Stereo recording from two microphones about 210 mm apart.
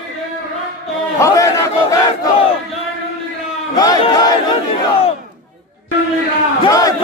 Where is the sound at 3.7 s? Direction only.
20° left (ahead or behind).